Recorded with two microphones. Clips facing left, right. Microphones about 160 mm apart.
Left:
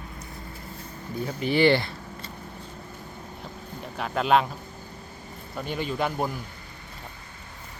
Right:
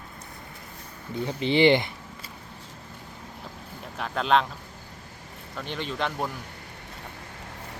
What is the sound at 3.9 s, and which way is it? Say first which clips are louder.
Speech: left 1 dB; 5° left (ahead or behind).